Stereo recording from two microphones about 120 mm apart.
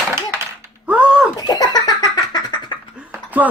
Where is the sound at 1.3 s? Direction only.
35° left (ahead or behind).